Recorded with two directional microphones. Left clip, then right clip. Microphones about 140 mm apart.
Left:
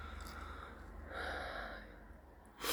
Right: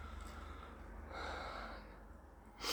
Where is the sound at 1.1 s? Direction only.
10° left (ahead or behind).